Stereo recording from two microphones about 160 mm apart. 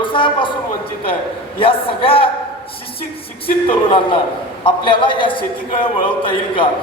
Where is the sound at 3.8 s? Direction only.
35° left (ahead or behind).